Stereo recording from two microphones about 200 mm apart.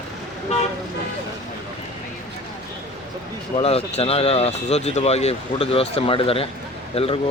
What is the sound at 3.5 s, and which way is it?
Speech, 30° left (ahead or behind).